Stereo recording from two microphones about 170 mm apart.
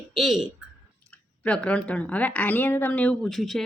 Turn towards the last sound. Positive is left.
turn(degrees=0)  # may be behind; listen again after turning